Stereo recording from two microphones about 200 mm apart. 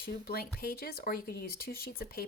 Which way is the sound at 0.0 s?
50° left (ahead or behind).